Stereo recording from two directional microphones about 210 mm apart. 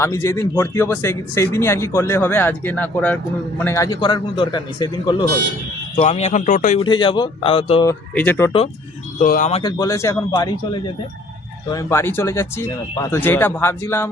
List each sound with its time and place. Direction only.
0.0 s a man's voice: 15° left (ahead or behind)
6.0 s a man's voice: 30° left (ahead or behind)
6.7 s a man's voice: 20° left (ahead or behind)
7.9 s speech: 10° left (ahead or behind)
9.1 s a man's voice: 40° left (ahead or behind)
9.5 s a man's voice: 25° left (ahead or behind)